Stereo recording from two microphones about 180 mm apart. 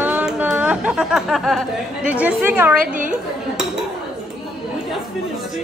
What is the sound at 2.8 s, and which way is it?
Speech, 45° right (ahead or behind).